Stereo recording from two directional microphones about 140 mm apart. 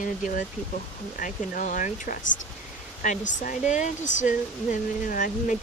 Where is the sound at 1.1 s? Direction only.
65° left (ahead or behind).